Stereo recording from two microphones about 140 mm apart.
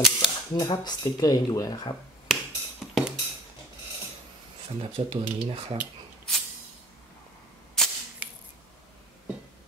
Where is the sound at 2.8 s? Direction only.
Centre (ahead or behind).